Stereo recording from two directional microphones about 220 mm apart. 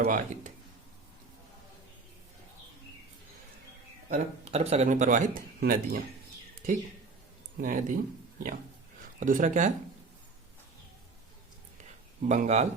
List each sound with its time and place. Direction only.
0.0 s speech: 35° right (ahead or behind)
4.1 s speech: 30° right (ahead or behind)
7.6 s speech: 35° right (ahead or behind)
9.2 s speech: 35° right (ahead or behind)
12.2 s speech: 30° right (ahead or behind)